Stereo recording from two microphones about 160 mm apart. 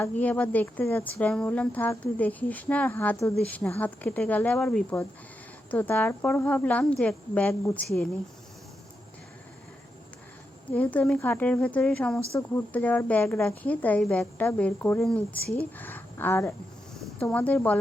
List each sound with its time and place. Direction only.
0.0 s speech: 10° left (ahead or behind)
10.7 s a woman's voice: 10° left (ahead or behind)